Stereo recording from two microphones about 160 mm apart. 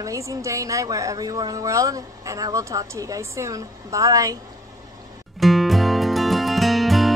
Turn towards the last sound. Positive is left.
turn(degrees=0)  # may be behind; listen again after turning